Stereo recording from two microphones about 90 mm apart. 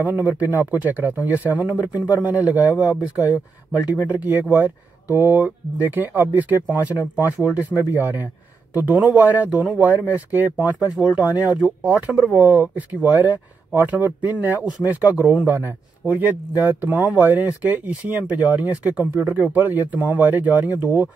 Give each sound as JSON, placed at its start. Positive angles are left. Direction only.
{"t": 0.0, "sound": "a man's voice", "side_deg": -20}